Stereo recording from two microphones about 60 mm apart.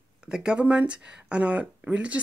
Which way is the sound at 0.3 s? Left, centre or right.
Centre.